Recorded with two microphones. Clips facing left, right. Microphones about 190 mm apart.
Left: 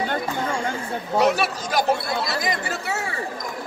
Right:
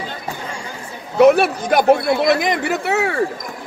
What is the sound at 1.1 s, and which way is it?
A man's voice, 55° right (ahead or behind).